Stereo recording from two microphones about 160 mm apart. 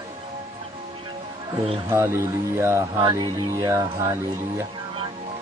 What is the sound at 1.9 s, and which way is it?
Speech, 15° right (ahead or behind).